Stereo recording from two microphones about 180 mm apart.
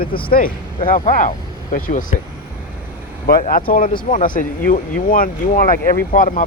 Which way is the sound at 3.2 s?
50° left (ahead or behind).